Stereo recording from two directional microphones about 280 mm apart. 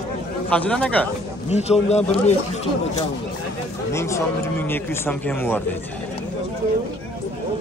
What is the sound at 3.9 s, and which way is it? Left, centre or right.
A man's voice, centre.